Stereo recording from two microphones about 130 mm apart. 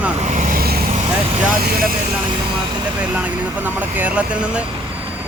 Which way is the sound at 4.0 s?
10° right (ahead or behind).